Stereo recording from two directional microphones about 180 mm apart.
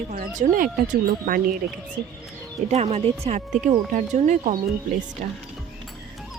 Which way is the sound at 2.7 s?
35° right (ahead or behind).